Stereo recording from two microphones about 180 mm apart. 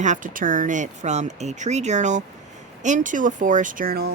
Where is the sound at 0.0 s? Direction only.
45° right (ahead or behind).